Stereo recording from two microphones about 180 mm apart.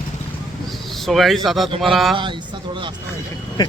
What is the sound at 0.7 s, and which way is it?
A man's voice, centre (ahead or behind).